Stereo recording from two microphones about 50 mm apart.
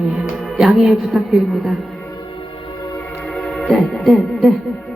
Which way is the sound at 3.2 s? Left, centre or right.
Centre.